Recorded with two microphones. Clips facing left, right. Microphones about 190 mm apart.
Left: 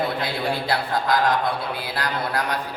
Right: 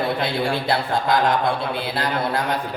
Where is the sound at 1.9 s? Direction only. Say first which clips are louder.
Right 2 dB; 25° right (ahead or behind).